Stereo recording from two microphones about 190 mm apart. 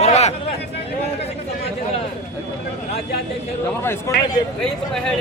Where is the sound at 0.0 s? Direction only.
35° left (ahead or behind).